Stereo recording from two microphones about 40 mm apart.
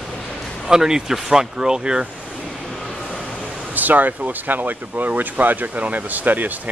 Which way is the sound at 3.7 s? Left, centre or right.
Right.